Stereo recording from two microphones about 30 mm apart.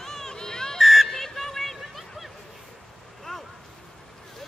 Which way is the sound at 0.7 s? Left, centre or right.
Centre.